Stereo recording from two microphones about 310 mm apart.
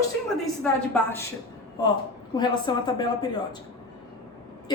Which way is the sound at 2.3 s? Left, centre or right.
Centre.